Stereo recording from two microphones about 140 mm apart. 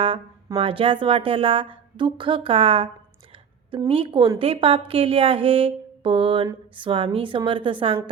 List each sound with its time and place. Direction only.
0.5 s a woman's voice: 40° right (ahead or behind)